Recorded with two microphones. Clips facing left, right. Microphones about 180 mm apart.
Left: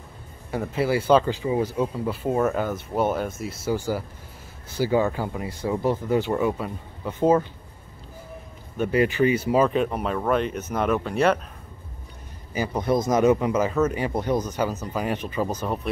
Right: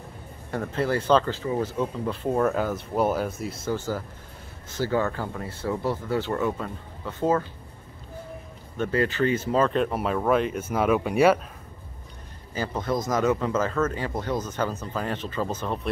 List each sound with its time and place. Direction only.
0.5 s speech: 10° left (ahead or behind)
3.6 s speech: 10° left (ahead or behind)
8.7 s speech: 15° left (ahead or behind); by 11.3 s 10° right (ahead or behind)
12.5 s speech: 15° left (ahead or behind)